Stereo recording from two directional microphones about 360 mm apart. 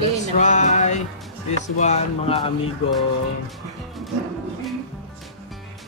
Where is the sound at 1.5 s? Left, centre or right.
Centre.